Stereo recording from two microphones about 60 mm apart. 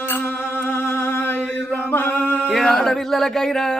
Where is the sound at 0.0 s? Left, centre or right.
Left.